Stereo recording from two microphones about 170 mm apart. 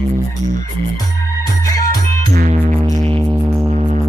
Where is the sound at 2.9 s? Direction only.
30° right (ahead or behind).